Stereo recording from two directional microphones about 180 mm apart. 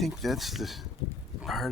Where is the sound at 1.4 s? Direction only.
Centre (ahead or behind).